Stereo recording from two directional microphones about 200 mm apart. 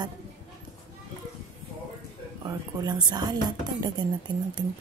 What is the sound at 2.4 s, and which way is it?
Speech, 20° right (ahead or behind).